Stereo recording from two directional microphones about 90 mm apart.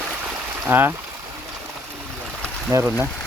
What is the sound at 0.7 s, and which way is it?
Speech, 25° right (ahead or behind).